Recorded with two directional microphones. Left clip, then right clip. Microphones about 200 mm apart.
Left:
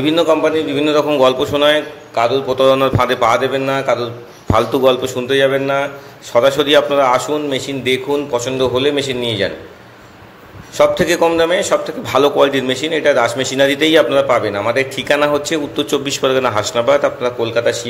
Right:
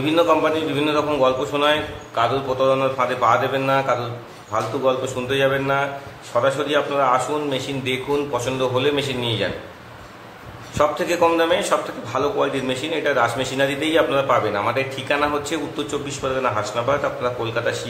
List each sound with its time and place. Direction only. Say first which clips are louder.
0.0 s a man's voice: left 4 dB; 25° left (ahead or behind)
10.8 s a man's voice: left 6 dB; 30° left (ahead or behind)
12.1 s a man's voice: left 9 dB; 35° left (ahead or behind)